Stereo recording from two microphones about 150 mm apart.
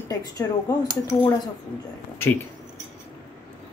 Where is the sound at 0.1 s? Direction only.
25° left (ahead or behind).